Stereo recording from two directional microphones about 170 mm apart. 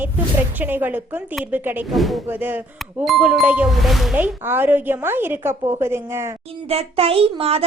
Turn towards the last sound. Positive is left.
turn(degrees=-35)  # may be behind; listen again after turning